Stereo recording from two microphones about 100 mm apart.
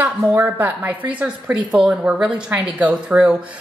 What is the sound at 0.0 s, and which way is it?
Speech, 20° right (ahead or behind).